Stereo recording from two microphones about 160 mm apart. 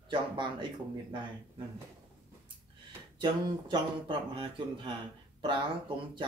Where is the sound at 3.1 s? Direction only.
30° right (ahead or behind).